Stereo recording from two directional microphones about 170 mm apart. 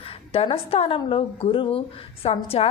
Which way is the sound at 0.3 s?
35° left (ahead or behind).